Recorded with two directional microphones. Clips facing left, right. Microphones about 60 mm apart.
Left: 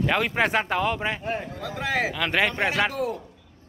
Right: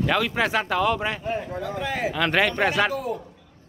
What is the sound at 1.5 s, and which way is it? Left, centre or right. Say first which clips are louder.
Speech: right 4 dB; right.